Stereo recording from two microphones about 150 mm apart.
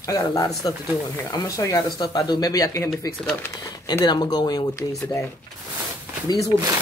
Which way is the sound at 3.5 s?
25° left (ahead or behind).